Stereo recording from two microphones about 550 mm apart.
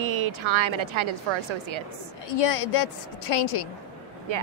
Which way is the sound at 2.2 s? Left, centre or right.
Left.